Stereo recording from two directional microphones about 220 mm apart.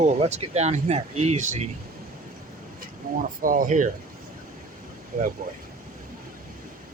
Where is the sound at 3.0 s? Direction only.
40° right (ahead or behind).